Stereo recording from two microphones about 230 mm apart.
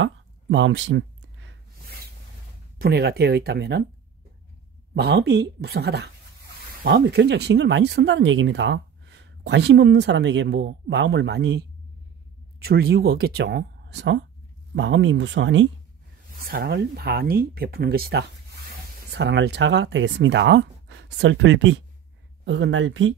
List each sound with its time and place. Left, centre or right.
0.0 s a sound: right
2.8 s speech: right
4.9 s speech: right
12.6 s speech: right